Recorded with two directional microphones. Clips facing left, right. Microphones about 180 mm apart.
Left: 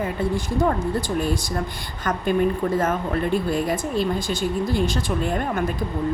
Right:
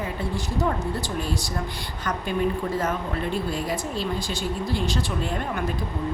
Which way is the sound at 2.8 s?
50° left (ahead or behind).